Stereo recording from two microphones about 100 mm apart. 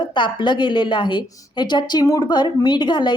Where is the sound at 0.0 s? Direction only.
50° left (ahead or behind).